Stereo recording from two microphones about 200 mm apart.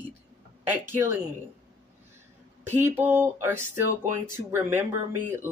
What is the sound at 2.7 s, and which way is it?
A man's voice, 10° right (ahead or behind).